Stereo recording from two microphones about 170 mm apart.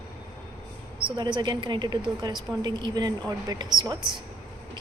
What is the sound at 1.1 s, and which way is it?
A woman's voice, 25° right (ahead or behind).